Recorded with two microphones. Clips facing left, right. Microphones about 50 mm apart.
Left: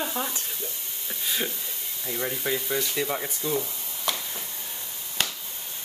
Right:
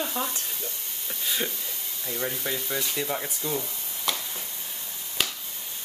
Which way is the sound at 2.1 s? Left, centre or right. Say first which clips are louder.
Left 2 dB; centre.